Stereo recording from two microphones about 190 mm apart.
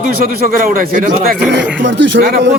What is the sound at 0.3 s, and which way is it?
A man's voice, 50° right (ahead or behind).